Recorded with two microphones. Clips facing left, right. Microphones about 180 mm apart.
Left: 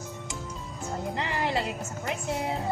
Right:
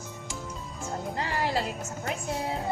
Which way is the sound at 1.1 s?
25° left (ahead or behind).